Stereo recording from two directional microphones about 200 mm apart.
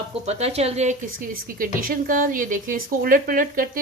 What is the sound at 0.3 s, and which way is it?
Speech, 30° right (ahead or behind).